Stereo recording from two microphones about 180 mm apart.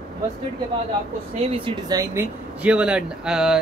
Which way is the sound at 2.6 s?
5° right (ahead or behind).